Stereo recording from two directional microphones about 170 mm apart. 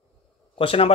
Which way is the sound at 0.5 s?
35° left (ahead or behind).